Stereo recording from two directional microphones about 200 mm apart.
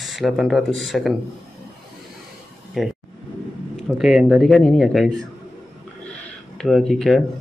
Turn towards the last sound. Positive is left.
turn(degrees=0)  # may be behind; listen again after turning